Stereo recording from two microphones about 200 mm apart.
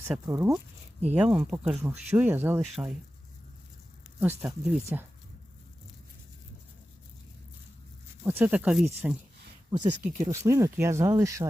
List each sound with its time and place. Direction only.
0.3 s speech: 15° right (ahead or behind)
4.2 s speech: 10° right (ahead or behind)
8.2 s speech: 10° right (ahead or behind)
9.7 s speech: 20° right (ahead or behind)